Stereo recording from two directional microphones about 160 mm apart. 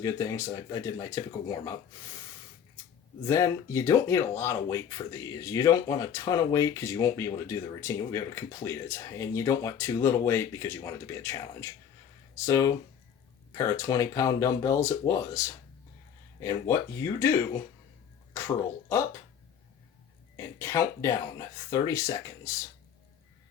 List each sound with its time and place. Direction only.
0.0 s speech: 20° left (ahead or behind)
3.2 s speech: 20° left (ahead or behind)
20.3 s speech: 20° left (ahead or behind)